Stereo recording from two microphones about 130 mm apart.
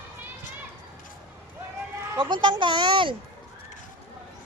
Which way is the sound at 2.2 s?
35° right (ahead or behind).